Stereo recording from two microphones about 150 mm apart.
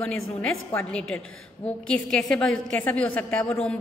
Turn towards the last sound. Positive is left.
turn(degrees=10)  # may be behind; listen again after turning